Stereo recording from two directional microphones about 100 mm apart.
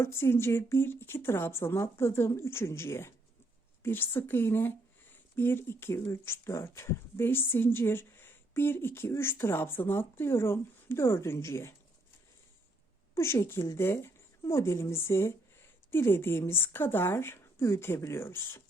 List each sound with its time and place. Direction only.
0.0 s speech: 25° left (ahead or behind)
13.1 s a woman's voice: 25° left (ahead or behind)